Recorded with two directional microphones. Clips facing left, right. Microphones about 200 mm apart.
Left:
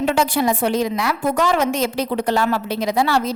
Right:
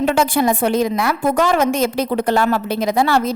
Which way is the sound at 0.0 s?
50° right (ahead or behind).